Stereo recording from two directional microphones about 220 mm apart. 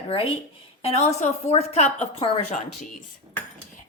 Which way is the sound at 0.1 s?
25° left (ahead or behind).